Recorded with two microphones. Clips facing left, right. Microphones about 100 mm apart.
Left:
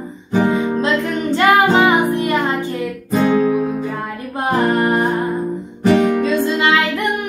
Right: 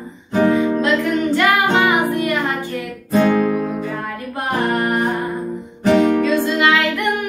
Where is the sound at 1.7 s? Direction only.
30° left (ahead or behind).